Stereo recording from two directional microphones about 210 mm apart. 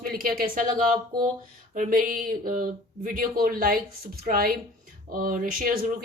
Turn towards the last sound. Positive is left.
turn(degrees=-40)  # may be behind; listen again after turning